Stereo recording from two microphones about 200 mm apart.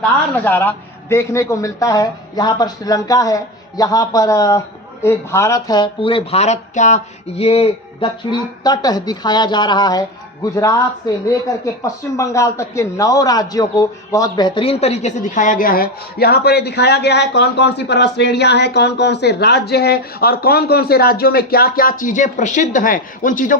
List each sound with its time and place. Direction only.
0.3 s speech: 10° left (ahead or behind); by 23.6 s 40° left (ahead or behind)